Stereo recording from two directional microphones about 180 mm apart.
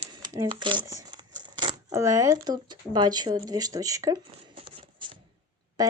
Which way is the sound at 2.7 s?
25° right (ahead or behind).